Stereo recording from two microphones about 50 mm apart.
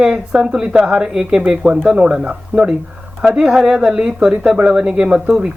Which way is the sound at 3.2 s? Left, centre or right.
Centre.